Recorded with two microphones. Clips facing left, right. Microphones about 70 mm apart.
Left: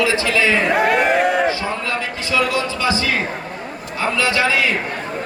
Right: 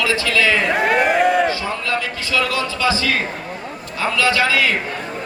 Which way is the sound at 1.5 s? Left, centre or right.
Left.